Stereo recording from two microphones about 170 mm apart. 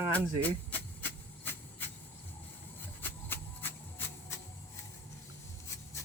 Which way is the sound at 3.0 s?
10° left (ahead or behind).